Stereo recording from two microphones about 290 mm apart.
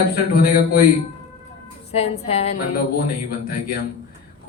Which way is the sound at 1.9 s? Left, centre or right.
Left.